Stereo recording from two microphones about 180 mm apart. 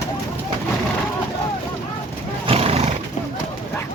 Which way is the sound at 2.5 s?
35° right (ahead or behind).